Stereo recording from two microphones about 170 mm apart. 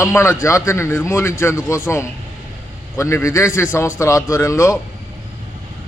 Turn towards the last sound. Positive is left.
turn(degrees=15)  # may be behind; listen again after turning